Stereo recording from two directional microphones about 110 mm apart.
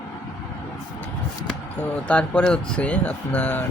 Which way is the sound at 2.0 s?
10° left (ahead or behind).